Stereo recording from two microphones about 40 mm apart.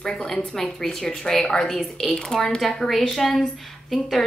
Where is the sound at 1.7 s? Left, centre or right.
Centre.